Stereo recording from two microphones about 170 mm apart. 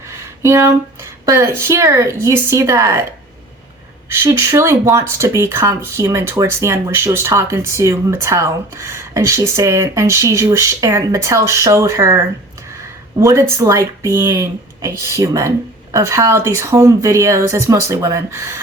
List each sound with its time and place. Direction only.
0.1 s a sound: 15° right (ahead or behind)
1.2 s speech: 15° right (ahead or behind)
4.1 s speech: 15° right (ahead or behind)